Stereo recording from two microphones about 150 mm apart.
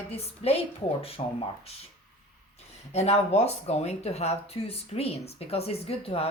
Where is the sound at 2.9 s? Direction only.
45° left (ahead or behind).